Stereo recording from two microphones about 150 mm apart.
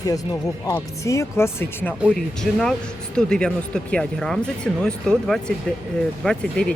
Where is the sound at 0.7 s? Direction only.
20° left (ahead or behind).